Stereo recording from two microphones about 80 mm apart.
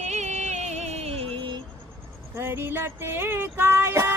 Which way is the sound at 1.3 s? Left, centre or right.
Right.